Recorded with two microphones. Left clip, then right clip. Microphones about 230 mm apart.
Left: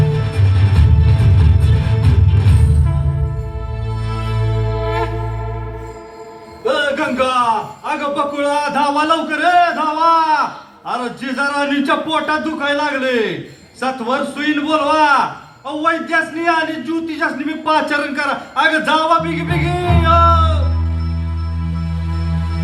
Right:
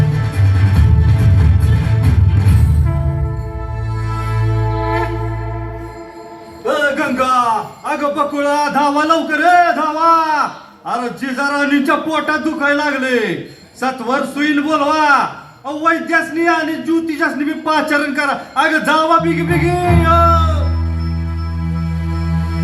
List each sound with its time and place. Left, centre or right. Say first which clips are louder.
0.1 s music: left 1 dB; left
4.1 s music: right 1 dB; left
6.7 s a sound: right 1 dB; left
22.2 s music: right 3 dB; left